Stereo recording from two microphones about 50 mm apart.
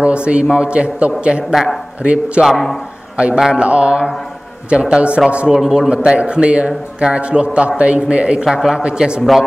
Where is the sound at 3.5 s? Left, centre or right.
Right.